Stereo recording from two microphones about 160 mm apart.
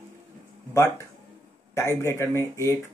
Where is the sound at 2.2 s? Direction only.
15° left (ahead or behind).